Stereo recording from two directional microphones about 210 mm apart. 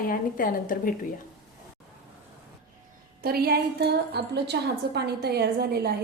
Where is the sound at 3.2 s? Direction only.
45° right (ahead or behind).